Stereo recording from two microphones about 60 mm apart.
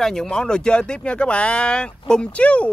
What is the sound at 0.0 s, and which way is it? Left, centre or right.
Speech, centre.